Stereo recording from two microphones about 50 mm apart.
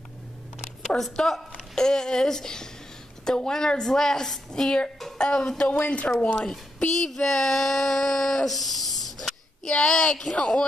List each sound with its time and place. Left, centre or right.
0.8 s a woman's voice: centre
5.9 s speech: left
6.3 s a woman's voice: centre
7.0 s a sound: centre
9.7 s a woman's voice: centre
10.3 s speech: left